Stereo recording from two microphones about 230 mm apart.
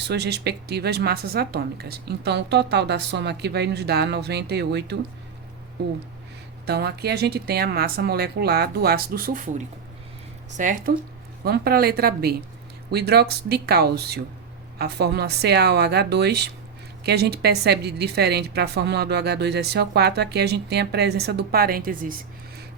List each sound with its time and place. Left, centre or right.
0.0 s a woman's voice: right
10.6 s a woman's voice: right